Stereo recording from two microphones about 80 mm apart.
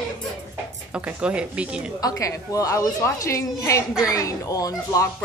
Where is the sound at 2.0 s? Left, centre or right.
Left.